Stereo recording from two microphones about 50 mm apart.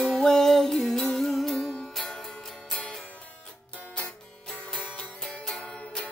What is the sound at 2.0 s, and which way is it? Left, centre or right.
Music, centre.